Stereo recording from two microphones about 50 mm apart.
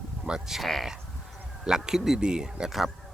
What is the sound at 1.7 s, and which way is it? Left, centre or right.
Speech, centre.